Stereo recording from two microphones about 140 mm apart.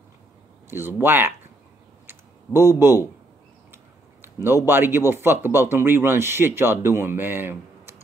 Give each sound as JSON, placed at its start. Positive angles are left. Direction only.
{"t": 0.7, "sound": "speech", "side_deg": -15}
{"t": 2.0, "sound": "clicking", "side_deg": -15}
{"t": 3.7, "sound": "a sound", "side_deg": -15}
{"t": 4.6, "sound": "speech", "side_deg": -15}